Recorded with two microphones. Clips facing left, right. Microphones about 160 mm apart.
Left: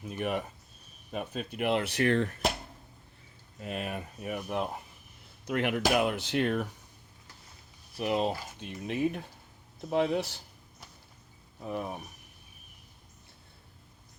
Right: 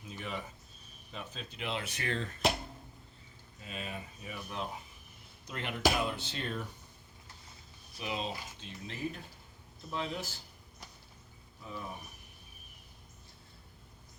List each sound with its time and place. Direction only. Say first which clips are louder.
0.0 s speech: left 9 dB; 60° left (ahead or behind)
3.6 s speech: left 7 dB; 60° left (ahead or behind)
5.5 s speech: left 5 dB; 70° left (ahead or behind)
7.9 s speech: left 9 dB; 55° left (ahead or behind)
11.6 s speech: left 8 dB; 60° left (ahead or behind)